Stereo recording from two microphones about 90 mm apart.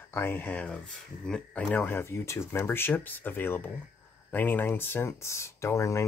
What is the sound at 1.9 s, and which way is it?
Speech, 30° left (ahead or behind).